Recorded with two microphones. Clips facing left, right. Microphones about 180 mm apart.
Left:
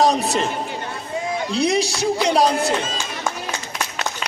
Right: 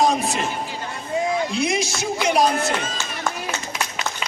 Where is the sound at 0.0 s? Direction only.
35° left (ahead or behind).